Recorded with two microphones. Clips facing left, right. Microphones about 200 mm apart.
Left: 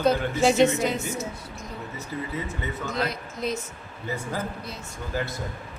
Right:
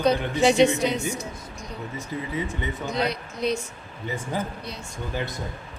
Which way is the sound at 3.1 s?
5° left (ahead or behind).